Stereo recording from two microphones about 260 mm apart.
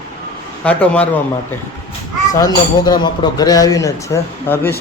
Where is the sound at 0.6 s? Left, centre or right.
Centre.